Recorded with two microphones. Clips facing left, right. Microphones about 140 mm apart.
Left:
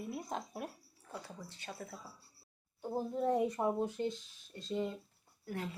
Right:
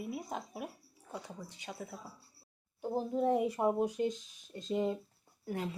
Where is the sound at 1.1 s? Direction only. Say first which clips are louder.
Right 2 dB; 15° right (ahead or behind).